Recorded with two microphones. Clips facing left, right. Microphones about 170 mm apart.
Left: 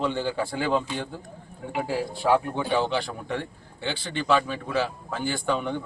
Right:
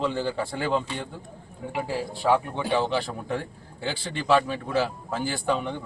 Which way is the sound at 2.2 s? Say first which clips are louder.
Even; 5° left (ahead or behind).